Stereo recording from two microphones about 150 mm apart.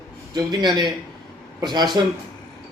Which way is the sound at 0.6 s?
30° right (ahead or behind).